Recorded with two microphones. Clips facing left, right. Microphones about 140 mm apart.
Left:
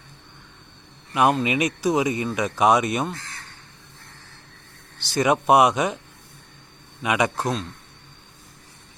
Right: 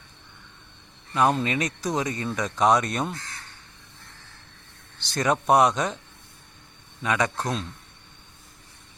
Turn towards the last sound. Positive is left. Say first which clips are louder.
# left 3 dB
turn(degrees=15)  # may be behind; listen again after turning